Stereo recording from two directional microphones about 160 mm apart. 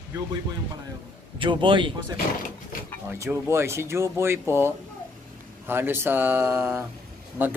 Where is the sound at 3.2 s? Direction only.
15° right (ahead or behind).